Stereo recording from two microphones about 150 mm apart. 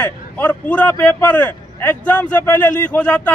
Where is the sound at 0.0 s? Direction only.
10° left (ahead or behind).